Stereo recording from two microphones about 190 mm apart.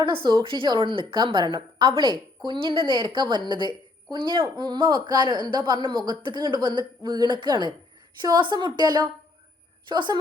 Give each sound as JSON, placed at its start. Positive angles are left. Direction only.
{"t": 0.0, "sound": "speech", "side_deg": -25}